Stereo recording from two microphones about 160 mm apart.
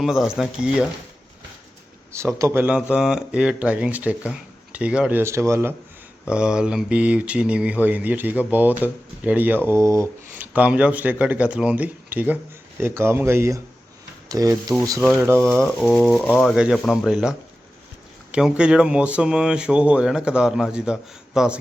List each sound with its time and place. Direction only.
0.0 s speech: centre (ahead or behind)
2.1 s speech: 15° right (ahead or behind)
6.3 s speech: 5° right (ahead or behind); by 14.6 s 20° right (ahead or behind)
15.4 s speech: 5° left (ahead or behind)